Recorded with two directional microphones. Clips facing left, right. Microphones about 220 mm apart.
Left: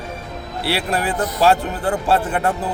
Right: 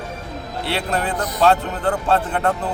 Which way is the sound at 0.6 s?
10° left (ahead or behind).